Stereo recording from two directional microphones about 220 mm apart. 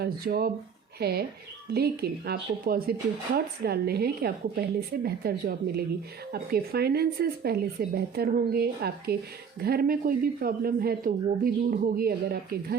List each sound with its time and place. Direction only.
0.0 s speech: 45° right (ahead or behind)